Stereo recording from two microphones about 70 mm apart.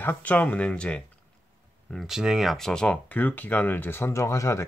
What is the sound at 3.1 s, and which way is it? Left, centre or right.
Speech, left.